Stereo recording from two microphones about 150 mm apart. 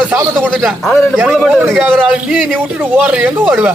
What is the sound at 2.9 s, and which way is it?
Speech, 10° right (ahead or behind).